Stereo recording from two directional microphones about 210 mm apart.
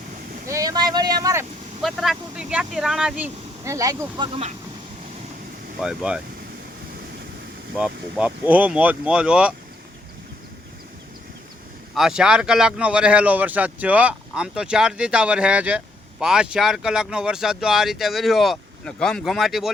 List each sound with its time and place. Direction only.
0.4 s speech: 15° right (ahead or behind)
1.8 s speech: centre (ahead or behind)
3.6 s speech: 15° right (ahead or behind)
5.8 s speech: 5° right (ahead or behind)
7.8 s speech: 5° right (ahead or behind)
11.9 s speech: centre (ahead or behind)